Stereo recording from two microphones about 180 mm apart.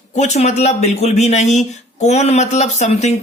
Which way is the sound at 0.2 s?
40° left (ahead or behind).